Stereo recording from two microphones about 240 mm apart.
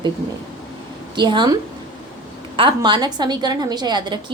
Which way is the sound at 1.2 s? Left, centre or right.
Centre.